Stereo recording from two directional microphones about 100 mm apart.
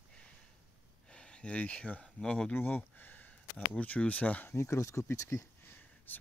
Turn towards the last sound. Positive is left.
turn(degrees=20)  # may be behind; listen again after turning